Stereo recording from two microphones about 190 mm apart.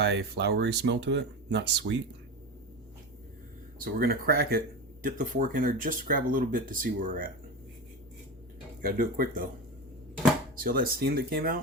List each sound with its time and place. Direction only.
0.0 s speech: 60° right (ahead or behind)
3.9 s speech: 55° right (ahead or behind)
8.8 s speech: 50° right (ahead or behind)
10.6 s speech: 50° right (ahead or behind)